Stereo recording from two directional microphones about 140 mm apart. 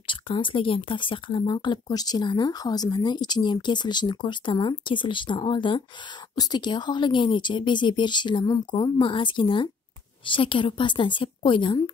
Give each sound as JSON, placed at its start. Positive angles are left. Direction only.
{"t": 0.0, "sound": "speech", "side_deg": 35}